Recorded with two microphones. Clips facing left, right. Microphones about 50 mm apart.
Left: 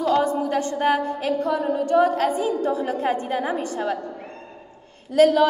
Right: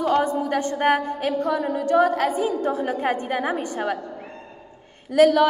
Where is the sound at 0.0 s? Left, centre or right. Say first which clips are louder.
Even; right.